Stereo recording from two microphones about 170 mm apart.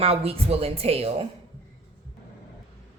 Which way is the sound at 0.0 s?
35° right (ahead or behind).